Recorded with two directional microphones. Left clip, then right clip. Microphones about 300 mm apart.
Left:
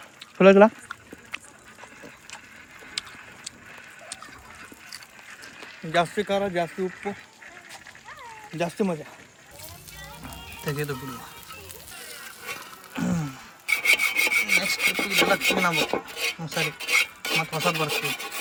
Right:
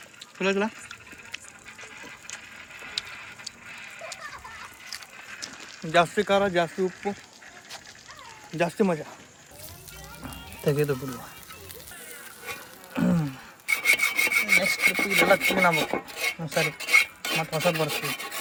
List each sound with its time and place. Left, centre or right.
0.3 s a sound: centre
3.0 s a sound: centre
5.8 s speech: centre
8.5 s speech: centre
10.0 s music: centre
12.5 s rub: centre
15.7 s dishes: centre